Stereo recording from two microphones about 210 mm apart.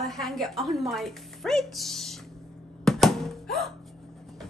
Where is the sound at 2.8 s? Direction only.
Centre (ahead or behind).